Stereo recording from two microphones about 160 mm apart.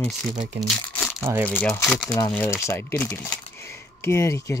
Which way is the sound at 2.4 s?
15° left (ahead or behind).